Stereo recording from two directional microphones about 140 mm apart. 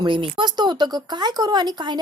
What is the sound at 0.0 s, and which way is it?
Speech, 35° right (ahead or behind).